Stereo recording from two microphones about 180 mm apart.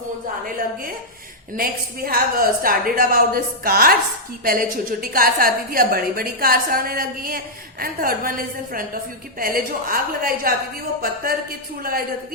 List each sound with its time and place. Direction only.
1.5 s a woman's voice: 55° right (ahead or behind)